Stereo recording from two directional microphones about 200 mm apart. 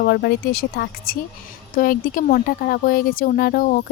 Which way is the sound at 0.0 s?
55° left (ahead or behind).